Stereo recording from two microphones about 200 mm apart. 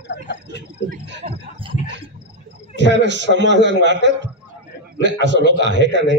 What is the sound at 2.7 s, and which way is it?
A man's voice, 60° right (ahead or behind).